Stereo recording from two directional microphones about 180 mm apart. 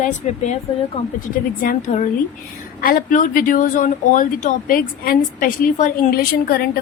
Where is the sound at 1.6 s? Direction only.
50° left (ahead or behind).